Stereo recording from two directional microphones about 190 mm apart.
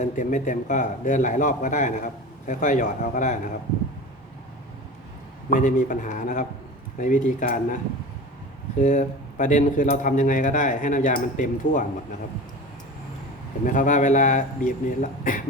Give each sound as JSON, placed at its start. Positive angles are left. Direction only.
{"t": 0.0, "sound": "a man's voice", "side_deg": 40}
{"t": 5.5, "sound": "a man's voice", "side_deg": 45}
{"t": 8.8, "sound": "speech", "side_deg": 40}
{"t": 13.7, "sound": "a man's voice", "side_deg": 40}